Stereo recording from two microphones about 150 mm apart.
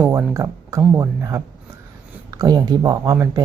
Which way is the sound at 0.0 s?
20° right (ahead or behind).